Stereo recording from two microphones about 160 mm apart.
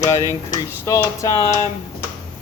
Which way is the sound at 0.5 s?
20° left (ahead or behind).